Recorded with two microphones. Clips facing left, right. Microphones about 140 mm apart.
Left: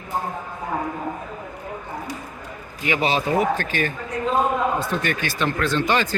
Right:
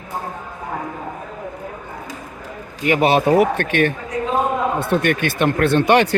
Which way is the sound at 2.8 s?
55° right (ahead or behind).